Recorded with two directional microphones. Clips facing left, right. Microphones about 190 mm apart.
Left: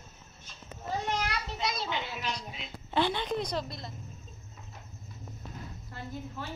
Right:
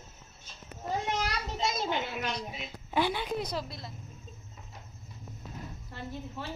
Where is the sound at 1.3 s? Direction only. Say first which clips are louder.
Right 1 dB; 45° right (ahead or behind).